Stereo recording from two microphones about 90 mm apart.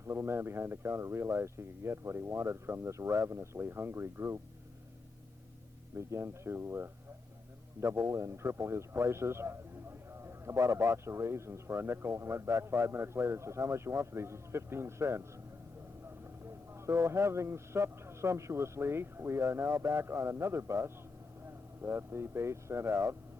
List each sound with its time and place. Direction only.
0.1 s a man's voice: 30° right (ahead or behind)
6.1 s a man's voice: 30° right (ahead or behind)
16.8 s a man's voice: 30° right (ahead or behind)